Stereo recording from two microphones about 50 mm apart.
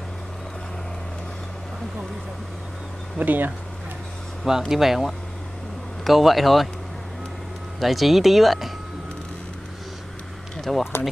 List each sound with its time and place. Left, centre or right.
3.2 s speech: right
4.5 s speech: centre
7.8 s speech: centre
10.7 s speech: centre